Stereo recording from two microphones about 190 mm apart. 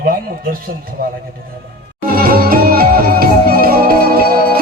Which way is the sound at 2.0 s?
50° right (ahead or behind).